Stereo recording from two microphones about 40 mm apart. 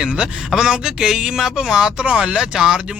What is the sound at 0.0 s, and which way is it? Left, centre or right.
A man's voice, right.